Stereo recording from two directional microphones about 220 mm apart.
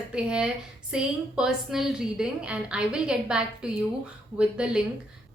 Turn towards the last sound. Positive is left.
turn(degrees=-5)  # may be behind; listen again after turning